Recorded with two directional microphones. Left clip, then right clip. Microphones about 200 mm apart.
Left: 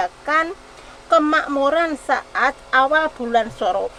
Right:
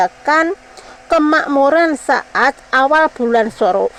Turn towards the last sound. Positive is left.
turn(degrees=-45)  # may be behind; listen again after turning